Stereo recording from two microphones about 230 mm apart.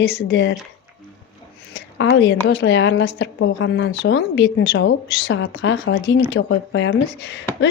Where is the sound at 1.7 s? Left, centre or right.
Left.